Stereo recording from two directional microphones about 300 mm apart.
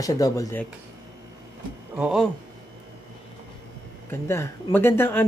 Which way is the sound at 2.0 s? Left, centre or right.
Centre.